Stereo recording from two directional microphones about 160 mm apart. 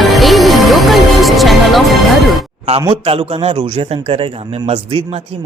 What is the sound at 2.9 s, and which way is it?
A man's voice, 40° right (ahead or behind).